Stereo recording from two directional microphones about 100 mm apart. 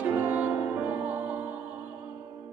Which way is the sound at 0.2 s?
15° right (ahead or behind).